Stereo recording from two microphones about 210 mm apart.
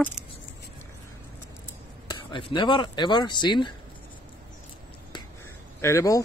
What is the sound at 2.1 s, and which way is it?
Speech, 20° left (ahead or behind).